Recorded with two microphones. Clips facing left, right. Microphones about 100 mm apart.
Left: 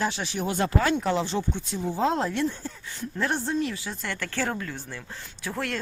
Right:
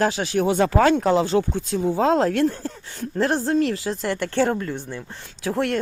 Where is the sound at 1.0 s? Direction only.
50° right (ahead or behind); by 2.5 s 90° right.